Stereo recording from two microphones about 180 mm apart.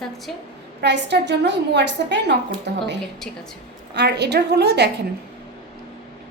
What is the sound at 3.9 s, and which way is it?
Speech, 70° right (ahead or behind).